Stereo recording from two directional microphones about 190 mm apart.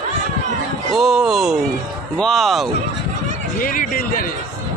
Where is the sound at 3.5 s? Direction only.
45° left (ahead or behind).